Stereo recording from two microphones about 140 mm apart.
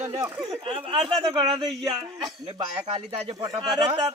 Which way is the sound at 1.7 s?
Centre (ahead or behind).